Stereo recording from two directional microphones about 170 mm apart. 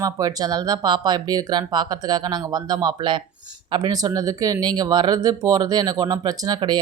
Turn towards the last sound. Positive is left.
turn(degrees=-25)  # may be behind; listen again after turning